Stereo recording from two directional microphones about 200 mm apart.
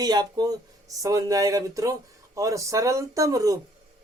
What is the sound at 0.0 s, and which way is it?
Speech, 20° right (ahead or behind).